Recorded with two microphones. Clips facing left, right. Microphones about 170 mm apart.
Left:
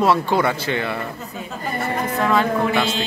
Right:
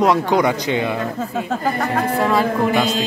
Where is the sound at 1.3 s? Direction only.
80° right.